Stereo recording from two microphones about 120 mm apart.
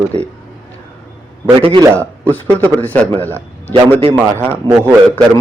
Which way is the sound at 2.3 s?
15° left (ahead or behind).